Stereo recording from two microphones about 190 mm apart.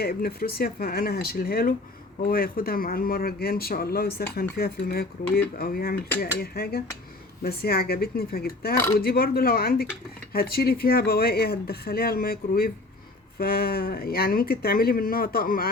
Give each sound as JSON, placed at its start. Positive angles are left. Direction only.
{"t": 0.0, "sound": "speech", "side_deg": 55}